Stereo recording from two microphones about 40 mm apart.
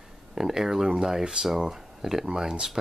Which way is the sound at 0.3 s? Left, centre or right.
Centre.